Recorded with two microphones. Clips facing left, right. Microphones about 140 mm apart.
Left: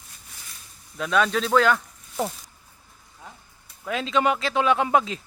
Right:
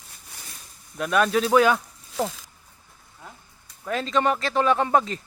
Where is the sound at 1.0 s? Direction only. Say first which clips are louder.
Right 1 dB; 5° right (ahead or behind).